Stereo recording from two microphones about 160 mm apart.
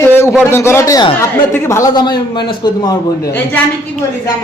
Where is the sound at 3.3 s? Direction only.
10° left (ahead or behind).